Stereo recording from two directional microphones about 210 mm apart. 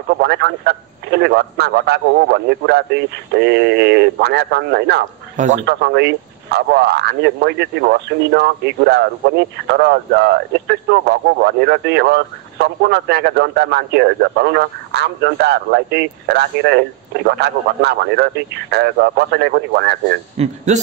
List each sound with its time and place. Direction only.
0.2 s speech: 50° right (ahead or behind)
20.3 s a man's voice: 35° right (ahead or behind)